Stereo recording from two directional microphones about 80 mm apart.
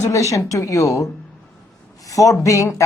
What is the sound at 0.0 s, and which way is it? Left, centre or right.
Speech, left.